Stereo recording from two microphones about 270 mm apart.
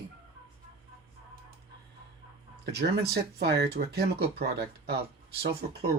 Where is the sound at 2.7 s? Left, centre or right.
Right.